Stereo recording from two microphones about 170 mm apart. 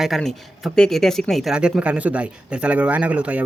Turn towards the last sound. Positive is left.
turn(degrees=-10)  # may be behind; listen again after turning